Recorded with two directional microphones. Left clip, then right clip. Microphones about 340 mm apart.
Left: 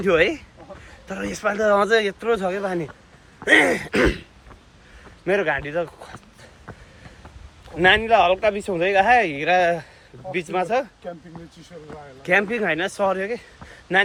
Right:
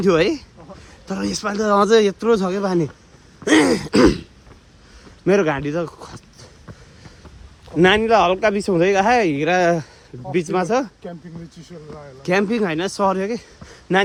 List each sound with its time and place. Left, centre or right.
0.0 s speech: centre
7.8 s speech: centre
12.2 s speech: centre